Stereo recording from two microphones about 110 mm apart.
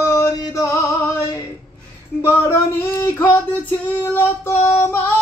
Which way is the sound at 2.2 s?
20° left (ahead or behind).